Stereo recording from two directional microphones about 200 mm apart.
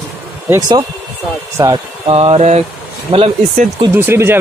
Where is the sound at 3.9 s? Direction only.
10° right (ahead or behind).